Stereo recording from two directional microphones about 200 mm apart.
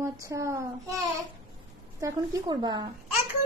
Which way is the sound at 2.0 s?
20° right (ahead or behind).